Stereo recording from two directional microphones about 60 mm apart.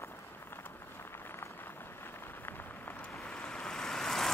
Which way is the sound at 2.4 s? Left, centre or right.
Left.